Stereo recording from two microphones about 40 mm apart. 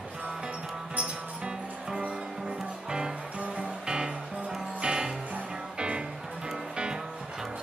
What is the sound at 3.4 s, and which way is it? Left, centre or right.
Music, right.